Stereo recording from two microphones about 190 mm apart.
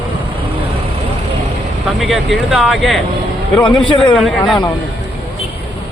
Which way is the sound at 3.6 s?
25° left (ahead or behind).